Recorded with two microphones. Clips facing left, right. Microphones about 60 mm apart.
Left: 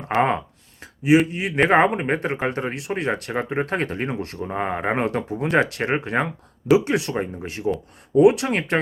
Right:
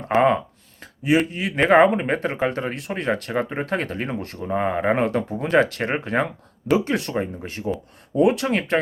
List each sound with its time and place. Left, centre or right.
1.0 s speech: centre; by 4.1 s left
4.4 s speech: centre
4.9 s speech: left
5.3 s speech: centre